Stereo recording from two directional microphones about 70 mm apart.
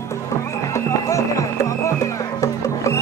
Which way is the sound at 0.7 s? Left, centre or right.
Left.